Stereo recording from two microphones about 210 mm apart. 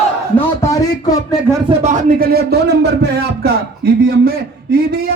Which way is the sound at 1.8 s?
35° right (ahead or behind).